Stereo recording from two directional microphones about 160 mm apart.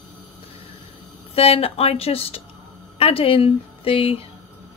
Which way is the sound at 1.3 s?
40° left (ahead or behind).